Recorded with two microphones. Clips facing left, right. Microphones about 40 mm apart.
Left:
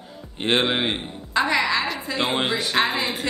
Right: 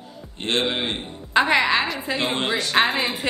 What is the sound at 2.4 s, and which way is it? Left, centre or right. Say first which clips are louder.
Speech: even; centre.